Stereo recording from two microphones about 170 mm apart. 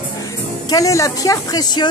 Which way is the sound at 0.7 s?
20° left (ahead or behind).